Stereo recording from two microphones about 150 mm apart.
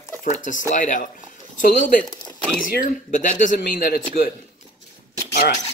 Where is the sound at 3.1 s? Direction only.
60° left (ahead or behind).